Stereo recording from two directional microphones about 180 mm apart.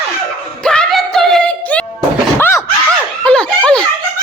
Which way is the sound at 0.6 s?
5° left (ahead or behind).